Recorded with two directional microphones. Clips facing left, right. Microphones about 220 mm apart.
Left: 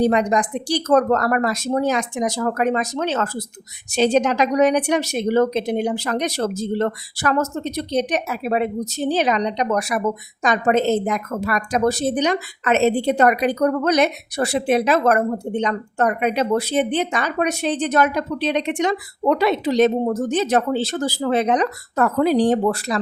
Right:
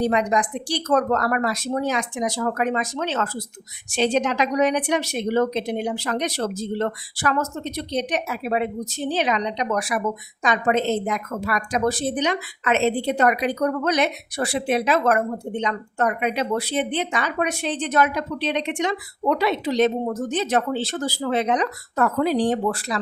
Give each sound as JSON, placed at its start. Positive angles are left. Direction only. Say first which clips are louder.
{"t": 0.0, "sound": "a woman's voice", "louder": "left 3 dB", "side_deg": 40}